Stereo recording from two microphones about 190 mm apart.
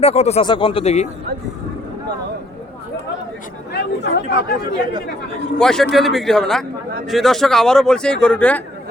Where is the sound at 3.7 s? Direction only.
60° left (ahead or behind).